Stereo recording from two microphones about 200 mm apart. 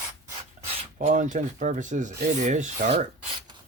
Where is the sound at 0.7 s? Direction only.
40° right (ahead or behind).